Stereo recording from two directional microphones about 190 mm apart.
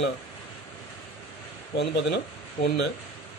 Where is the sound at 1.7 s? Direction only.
65° left (ahead or behind).